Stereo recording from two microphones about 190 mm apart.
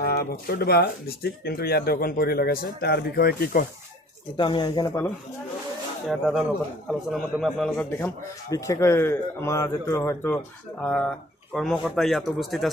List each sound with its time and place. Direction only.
0.0 s speech: 55° left (ahead or behind)
4.4 s speech: 25° left (ahead or behind)
6.0 s a man's voice: centre (ahead or behind)